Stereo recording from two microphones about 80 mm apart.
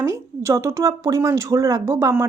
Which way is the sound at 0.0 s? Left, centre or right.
Right.